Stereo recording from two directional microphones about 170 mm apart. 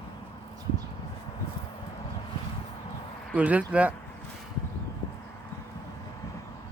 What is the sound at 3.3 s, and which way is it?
Speech, 10° right (ahead or behind).